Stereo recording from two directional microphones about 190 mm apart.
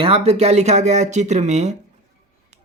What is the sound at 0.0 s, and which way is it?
Speech, 30° right (ahead or behind).